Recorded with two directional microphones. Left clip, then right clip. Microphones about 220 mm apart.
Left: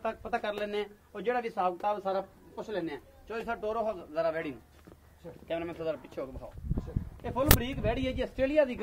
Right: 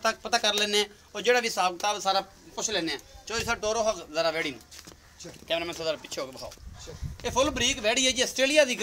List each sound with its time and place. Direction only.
0.0 s speech: 40° right (ahead or behind)
7.2 s speech: 45° right (ahead or behind)